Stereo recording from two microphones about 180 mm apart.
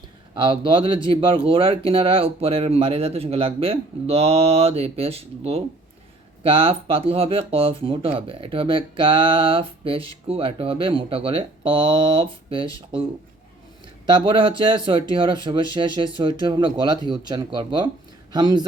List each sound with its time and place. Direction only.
0.3 s speech: 30° right (ahead or behind)
14.1 s speech: 30° right (ahead or behind)